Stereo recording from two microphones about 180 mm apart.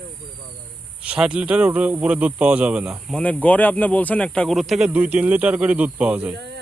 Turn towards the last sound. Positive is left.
turn(degrees=-5)  # may be behind; listen again after turning